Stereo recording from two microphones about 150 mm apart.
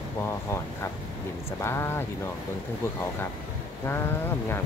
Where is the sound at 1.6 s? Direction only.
15° left (ahead or behind).